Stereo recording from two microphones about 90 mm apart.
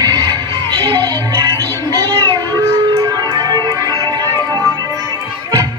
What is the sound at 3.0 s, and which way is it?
Music, 45° right (ahead or behind).